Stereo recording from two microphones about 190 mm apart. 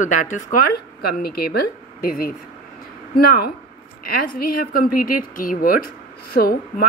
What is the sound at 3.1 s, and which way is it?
Speech, 55° left (ahead or behind).